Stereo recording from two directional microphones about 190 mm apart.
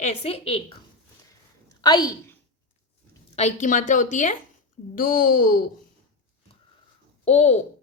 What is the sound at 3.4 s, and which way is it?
A woman's voice, 40° left (ahead or behind).